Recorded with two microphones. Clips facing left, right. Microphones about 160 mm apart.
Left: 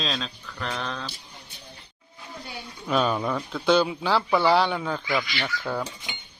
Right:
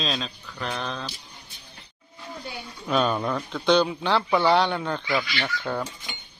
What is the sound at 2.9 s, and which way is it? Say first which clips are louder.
Speech: even; centre (ahead or behind).